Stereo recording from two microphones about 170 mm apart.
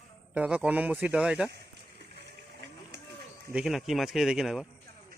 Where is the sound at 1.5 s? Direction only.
75° right (ahead or behind).